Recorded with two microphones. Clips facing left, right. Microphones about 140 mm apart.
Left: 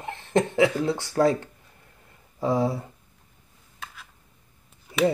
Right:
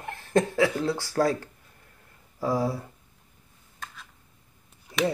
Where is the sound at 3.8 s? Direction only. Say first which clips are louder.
Left 1 dB; 5° left (ahead or behind).